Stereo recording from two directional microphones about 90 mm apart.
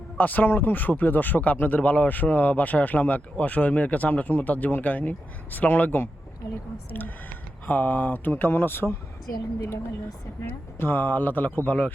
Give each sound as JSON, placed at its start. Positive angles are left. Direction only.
{"t": 0.2, "sound": "speech", "side_deg": 20}
{"t": 10.4, "sound": "speech", "side_deg": 25}